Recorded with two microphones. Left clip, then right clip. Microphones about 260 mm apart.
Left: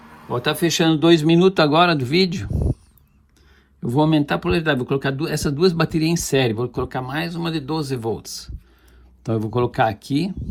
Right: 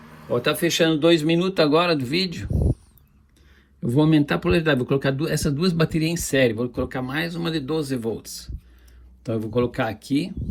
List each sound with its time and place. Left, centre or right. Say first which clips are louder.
0.3 s speech: left 1 dB; centre
2.5 s a sound: even; right
3.8 s speech: left 1 dB; centre